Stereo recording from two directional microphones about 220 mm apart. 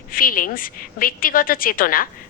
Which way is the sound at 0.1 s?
40° left (ahead or behind).